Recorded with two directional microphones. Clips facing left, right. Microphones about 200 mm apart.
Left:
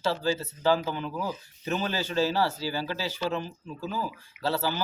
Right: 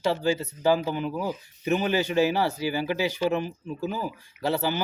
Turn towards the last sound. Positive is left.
turn(degrees=-15)  # may be behind; listen again after turning